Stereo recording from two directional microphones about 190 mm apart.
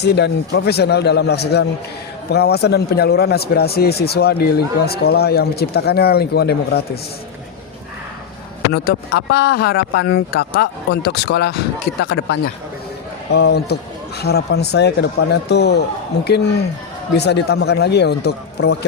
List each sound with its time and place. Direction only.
0.0 s speech: 60° left (ahead or behind)
8.7 s speech: 60° left (ahead or behind)